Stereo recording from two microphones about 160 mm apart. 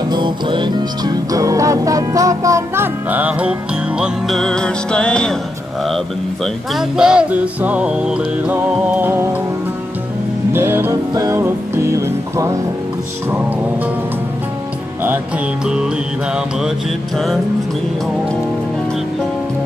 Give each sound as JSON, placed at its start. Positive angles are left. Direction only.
{"t": 0.1, "sound": "music", "side_deg": -30}
{"t": 10.5, "sound": "music", "side_deg": -15}
{"t": 15.6, "sound": "music", "side_deg": -5}